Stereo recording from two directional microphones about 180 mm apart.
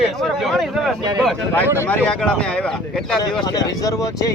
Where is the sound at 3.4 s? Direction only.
20° left (ahead or behind).